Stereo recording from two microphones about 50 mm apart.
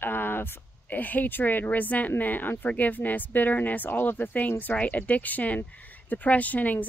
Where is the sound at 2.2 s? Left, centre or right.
Left.